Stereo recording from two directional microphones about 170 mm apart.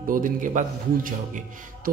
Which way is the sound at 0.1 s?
50° right (ahead or behind).